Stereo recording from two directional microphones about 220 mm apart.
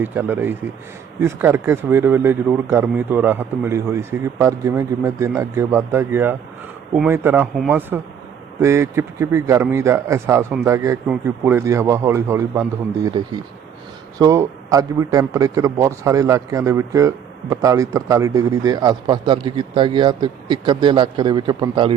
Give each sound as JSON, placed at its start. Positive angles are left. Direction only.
{"t": 0.0, "sound": "a man's voice", "side_deg": -10}